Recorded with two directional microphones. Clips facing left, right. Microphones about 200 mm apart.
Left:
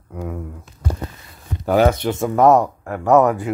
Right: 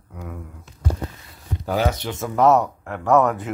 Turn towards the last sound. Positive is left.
turn(degrees=15)  # may be behind; listen again after turning